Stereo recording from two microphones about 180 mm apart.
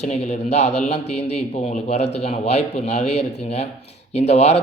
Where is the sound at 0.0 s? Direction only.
40° left (ahead or behind).